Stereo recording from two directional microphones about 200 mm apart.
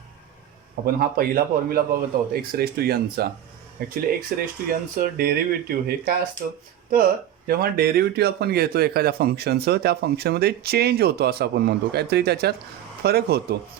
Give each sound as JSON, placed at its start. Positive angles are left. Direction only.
{"t": 0.9, "sound": "a man's voice", "side_deg": -45}
{"t": 7.4, "sound": "a man's voice", "side_deg": -50}